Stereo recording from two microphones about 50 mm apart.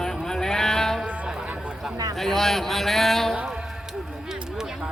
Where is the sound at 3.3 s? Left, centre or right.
Centre.